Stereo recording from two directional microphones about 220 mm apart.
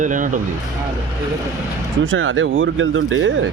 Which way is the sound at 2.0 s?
65° right (ahead or behind).